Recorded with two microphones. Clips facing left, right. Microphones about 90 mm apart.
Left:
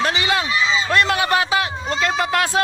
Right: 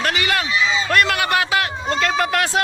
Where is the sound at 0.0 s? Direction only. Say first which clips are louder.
Left 1 dB; 25° left (ahead or behind).